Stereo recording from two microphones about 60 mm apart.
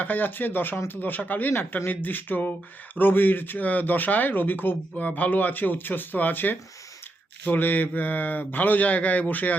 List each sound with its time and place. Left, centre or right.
0.0 s speech: left
4.9 s speech: left